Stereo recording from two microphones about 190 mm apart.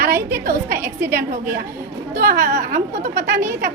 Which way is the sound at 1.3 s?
50° right (ahead or behind).